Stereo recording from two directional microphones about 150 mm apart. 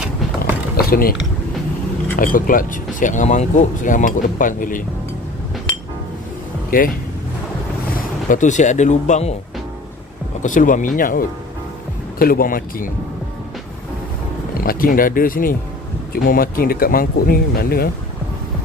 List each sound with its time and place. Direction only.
0.7 s a sound: 75° left (ahead or behind)
2.1 s speech: 65° left (ahead or behind)
7.9 s speech: 60° left (ahead or behind)
10.4 s speech: 60° left (ahead or behind)
14.6 s speech: 70° left (ahead or behind); by 17.8 s 90° left